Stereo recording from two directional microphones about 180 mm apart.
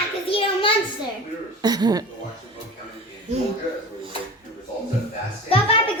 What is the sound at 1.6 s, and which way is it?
Speech, 20° right (ahead or behind).